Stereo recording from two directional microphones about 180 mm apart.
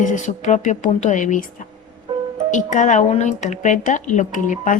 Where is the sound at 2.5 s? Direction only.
45° left (ahead or behind).